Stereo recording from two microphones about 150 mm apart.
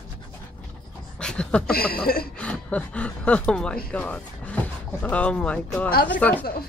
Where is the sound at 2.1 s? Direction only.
90° left.